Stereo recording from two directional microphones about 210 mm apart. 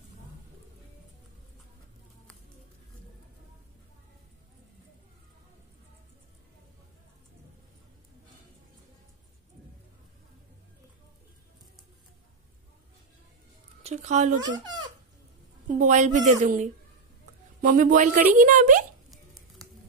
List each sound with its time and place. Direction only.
13.8 s speech: 35° right (ahead or behind)
14.4 s speech: 20° right (ahead or behind)
15.8 s speech: 35° right (ahead or behind)